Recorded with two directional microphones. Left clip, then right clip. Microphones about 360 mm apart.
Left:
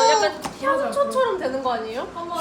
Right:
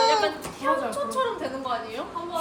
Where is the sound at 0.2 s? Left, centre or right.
Left.